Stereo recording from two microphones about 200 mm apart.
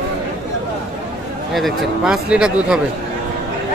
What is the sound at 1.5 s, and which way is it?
Speech, centre (ahead or behind).